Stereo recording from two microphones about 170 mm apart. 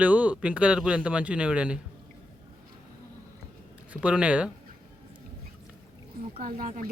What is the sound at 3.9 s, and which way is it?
Speech, 10° right (ahead or behind).